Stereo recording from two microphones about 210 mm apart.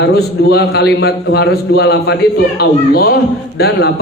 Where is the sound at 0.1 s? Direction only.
50° left (ahead or behind).